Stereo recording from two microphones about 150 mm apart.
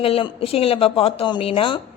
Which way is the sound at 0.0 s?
40° left (ahead or behind).